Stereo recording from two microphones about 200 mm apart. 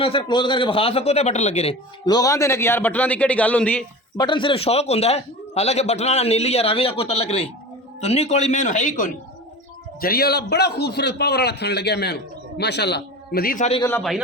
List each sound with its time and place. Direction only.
0.0 s a man's voice: 25° left (ahead or behind)
2.0 s a man's voice: 20° left (ahead or behind)
4.2 s a man's voice: 25° left (ahead or behind); by 13.7 s 45° left (ahead or behind)